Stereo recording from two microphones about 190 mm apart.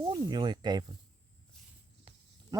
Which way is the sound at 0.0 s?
25° right (ahead or behind).